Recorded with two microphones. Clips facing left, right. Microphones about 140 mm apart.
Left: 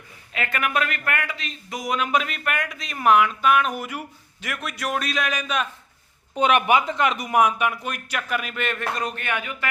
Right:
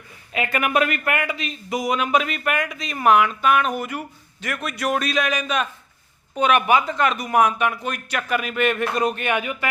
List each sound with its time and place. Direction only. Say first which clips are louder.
0.3 s speech: right 4 dB; 10° right (ahead or behind)
6.3 s speech: right 1 dB; 25° left (ahead or behind); by 9.6 s 15° right (ahead or behind)